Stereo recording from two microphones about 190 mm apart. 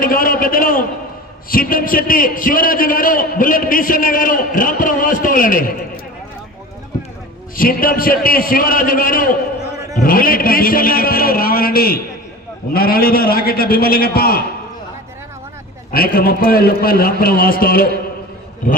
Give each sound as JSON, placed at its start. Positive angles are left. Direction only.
{"t": 0.0, "sound": "a man's voice", "side_deg": 50}
{"t": 7.5, "sound": "a man's voice", "side_deg": 45}
{"t": 15.9, "sound": "a man's voice", "side_deg": 50}